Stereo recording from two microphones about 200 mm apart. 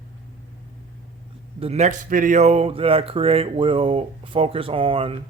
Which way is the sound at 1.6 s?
30° right (ahead or behind).